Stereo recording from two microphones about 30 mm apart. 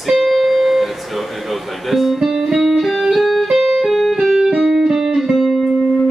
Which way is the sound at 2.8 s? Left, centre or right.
Centre.